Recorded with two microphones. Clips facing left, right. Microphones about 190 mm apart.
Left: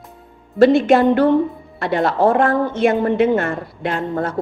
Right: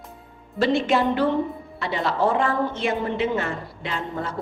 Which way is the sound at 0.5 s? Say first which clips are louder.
Left 9 dB; 55° left (ahead or behind).